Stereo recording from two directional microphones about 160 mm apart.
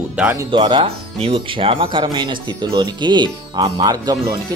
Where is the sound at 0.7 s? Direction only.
35° right (ahead or behind).